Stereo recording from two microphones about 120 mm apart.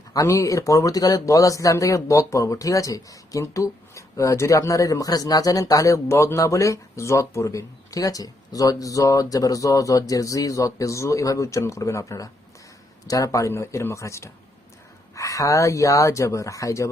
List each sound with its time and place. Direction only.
0.1 s speech: 25° left (ahead or behind)